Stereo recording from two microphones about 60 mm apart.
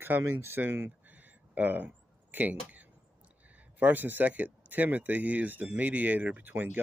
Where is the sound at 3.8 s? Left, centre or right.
Right.